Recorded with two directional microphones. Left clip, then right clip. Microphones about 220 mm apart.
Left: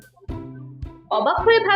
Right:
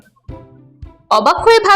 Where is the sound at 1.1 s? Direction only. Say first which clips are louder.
Right 7 dB; 25° right (ahead or behind).